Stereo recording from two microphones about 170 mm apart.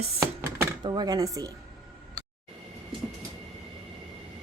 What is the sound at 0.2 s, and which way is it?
Chopping, 20° right (ahead or behind).